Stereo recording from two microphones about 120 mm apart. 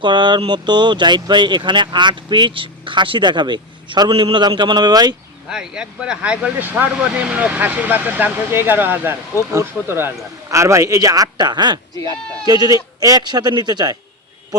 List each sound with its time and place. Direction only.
0.0 s speech: 40° right (ahead or behind)
5.5 s speech: 5° right (ahead or behind); by 13.9 s 35° right (ahead or behind)